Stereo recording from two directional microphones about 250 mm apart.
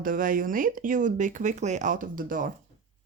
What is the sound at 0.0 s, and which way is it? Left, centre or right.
Speech, right.